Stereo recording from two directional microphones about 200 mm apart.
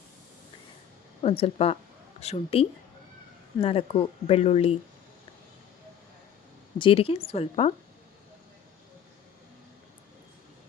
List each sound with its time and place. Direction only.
1.2 s speech: 30° left (ahead or behind)
6.7 s speech: 25° left (ahead or behind)